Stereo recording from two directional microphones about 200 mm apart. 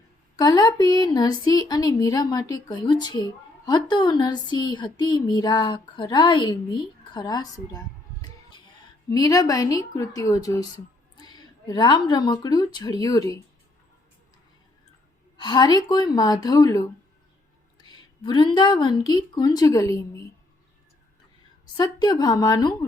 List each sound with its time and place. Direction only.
0.3 s a woman's voice: 20° left (ahead or behind)
9.0 s a woman's voice: 20° left (ahead or behind)
15.4 s a woman's voice: 20° left (ahead or behind)
17.8 s a woman's voice: 25° left (ahead or behind)
21.8 s a woman's voice: 20° left (ahead or behind)